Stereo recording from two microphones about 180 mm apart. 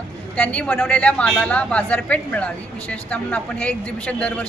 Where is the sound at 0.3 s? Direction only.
5° left (ahead or behind).